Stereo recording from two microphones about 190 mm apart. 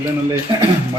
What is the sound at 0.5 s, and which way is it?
Speech, 25° right (ahead or behind).